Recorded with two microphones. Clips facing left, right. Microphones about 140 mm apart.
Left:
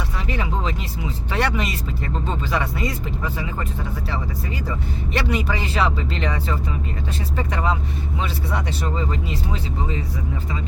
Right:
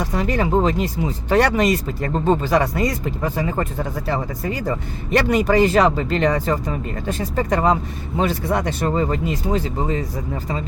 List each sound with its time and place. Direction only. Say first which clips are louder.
0.0 s speech: right 7 dB; 40° right (ahead or behind)